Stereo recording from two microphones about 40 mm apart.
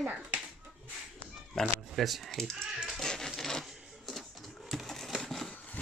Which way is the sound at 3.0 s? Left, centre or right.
Centre.